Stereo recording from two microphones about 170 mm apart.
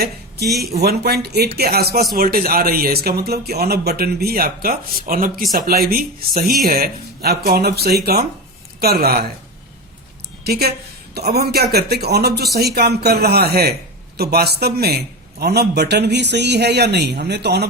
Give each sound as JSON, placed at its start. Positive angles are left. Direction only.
{"t": 0.0, "sound": "a man's voice", "side_deg": -70}
{"t": 10.4, "sound": "a man's voice", "side_deg": -70}